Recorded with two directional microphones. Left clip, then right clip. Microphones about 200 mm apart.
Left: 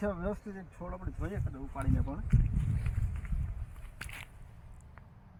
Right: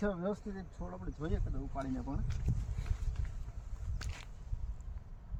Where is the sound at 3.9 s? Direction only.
15° left (ahead or behind).